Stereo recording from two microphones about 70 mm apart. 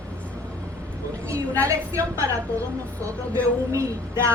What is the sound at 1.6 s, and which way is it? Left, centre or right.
A woman's voice, right.